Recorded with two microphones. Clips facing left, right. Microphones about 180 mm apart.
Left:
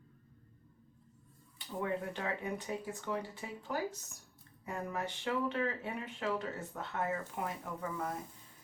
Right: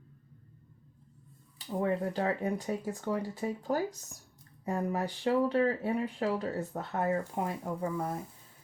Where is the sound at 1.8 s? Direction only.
35° right (ahead or behind).